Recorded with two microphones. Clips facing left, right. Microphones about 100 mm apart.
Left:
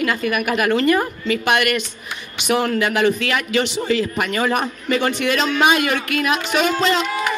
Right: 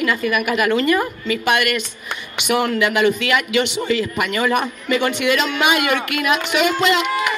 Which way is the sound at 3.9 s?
45° left (ahead or behind).